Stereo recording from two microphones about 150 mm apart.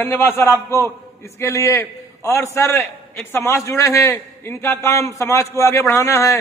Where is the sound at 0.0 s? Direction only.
15° left (ahead or behind).